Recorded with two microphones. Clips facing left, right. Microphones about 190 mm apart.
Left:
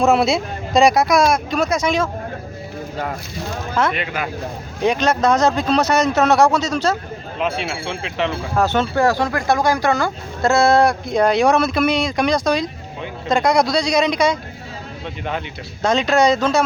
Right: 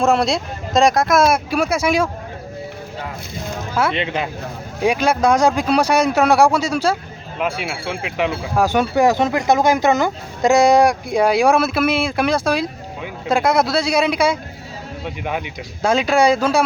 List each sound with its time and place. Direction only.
0.0 s speech: centre (ahead or behind)
3.9 s speech: 25° right (ahead or behind)
4.8 s a man's voice: 10° right (ahead or behind)